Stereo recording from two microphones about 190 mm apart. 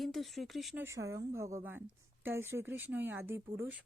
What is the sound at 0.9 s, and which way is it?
Speech, 15° right (ahead or behind).